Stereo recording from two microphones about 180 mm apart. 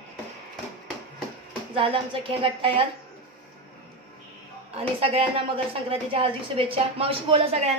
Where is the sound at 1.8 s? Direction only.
30° right (ahead or behind).